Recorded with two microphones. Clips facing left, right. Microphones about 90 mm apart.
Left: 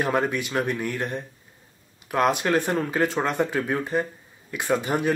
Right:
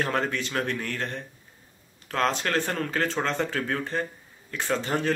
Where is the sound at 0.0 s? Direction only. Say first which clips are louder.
Left 3 dB; 15° left (ahead or behind).